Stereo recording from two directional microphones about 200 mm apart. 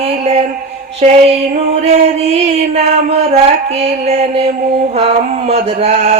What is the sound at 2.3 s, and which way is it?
Mantra, 30° right (ahead or behind).